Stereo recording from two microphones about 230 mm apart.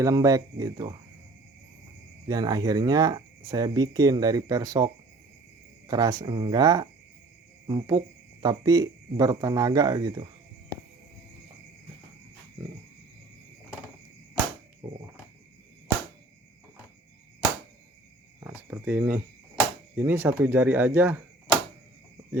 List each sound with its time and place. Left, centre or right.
0.0 s speech: centre
2.2 s speech: centre
5.9 s speech: centre
14.8 s speech: centre
18.3 s speech: centre